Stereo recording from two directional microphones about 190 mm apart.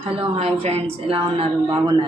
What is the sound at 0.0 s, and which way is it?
A woman's voice, 30° right (ahead or behind).